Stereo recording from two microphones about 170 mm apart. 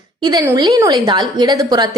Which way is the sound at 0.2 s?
25° right (ahead or behind).